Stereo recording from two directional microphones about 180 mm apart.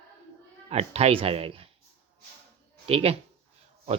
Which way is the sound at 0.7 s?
35° right (ahead or behind).